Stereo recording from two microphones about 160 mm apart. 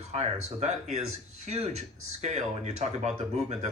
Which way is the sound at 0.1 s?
45° right (ahead or behind).